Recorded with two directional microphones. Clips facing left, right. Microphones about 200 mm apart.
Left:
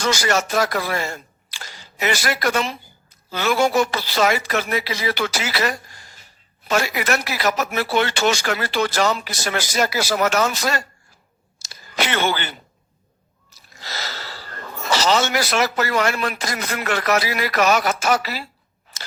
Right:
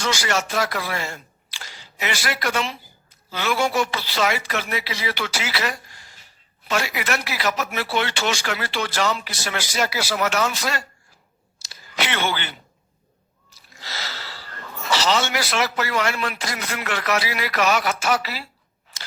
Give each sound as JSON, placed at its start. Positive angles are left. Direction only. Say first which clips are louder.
{"t": 0.0, "sound": "speech", "louder": "left 4 dB", "side_deg": 40}
{"t": 11.6, "sound": "a sound", "louder": "left 3 dB", "side_deg": 45}
{"t": 13.7, "sound": "speech", "louder": "left 3 dB", "side_deg": 45}